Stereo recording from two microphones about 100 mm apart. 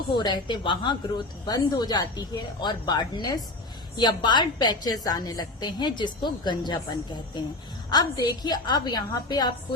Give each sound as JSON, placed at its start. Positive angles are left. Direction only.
{"t": 0.1, "sound": "a woman's voice", "side_deg": 50}